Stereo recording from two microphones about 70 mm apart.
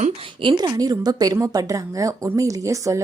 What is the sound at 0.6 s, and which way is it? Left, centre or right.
A woman's voice, right.